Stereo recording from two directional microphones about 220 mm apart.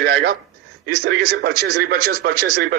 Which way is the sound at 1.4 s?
45° right (ahead or behind).